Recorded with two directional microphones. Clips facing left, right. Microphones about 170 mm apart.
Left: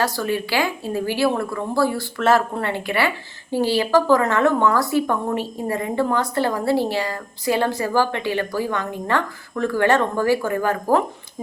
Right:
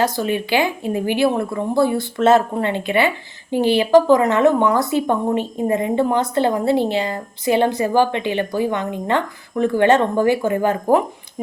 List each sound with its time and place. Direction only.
0.0 s speech: 20° right (ahead or behind)